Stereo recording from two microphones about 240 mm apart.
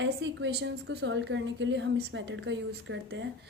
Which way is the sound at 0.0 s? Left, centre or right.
Right.